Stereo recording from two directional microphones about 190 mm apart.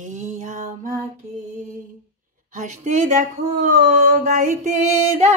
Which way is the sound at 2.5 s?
40° right (ahead or behind).